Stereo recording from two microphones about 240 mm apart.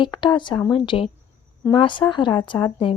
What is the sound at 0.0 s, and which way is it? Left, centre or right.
Speech, centre.